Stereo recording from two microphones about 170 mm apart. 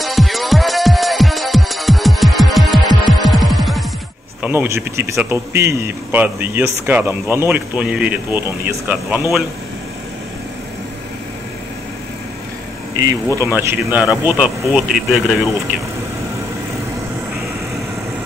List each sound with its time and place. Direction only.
0.0 s music: centre (ahead or behind)
4.4 s speech: 10° right (ahead or behind)
12.9 s speech: 20° right (ahead or behind); by 15.8 s centre (ahead or behind)